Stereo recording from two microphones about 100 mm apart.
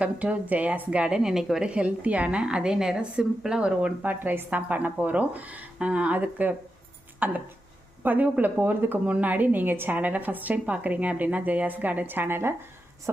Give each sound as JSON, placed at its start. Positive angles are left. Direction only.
{"t": 0.0, "sound": "a woman's voice", "side_deg": -15}